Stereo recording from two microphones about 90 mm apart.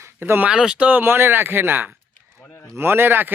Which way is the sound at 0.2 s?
20° right (ahead or behind).